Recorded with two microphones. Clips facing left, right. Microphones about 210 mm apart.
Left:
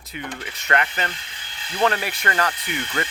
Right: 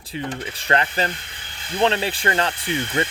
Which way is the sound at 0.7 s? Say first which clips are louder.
Right 2 dB; 30° right (ahead or behind).